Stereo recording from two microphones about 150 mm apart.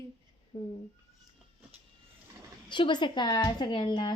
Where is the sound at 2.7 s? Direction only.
30° left (ahead or behind).